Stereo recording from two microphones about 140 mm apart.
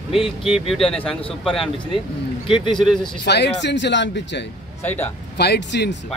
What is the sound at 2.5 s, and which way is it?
Speech, 35° left (ahead or behind).